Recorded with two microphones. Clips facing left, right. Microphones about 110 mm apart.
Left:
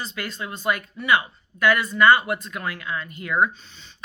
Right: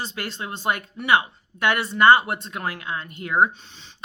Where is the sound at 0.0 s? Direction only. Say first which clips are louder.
Right 1 dB; 30° right (ahead or behind).